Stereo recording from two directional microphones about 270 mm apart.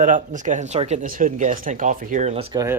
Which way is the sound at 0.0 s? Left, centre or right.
Right.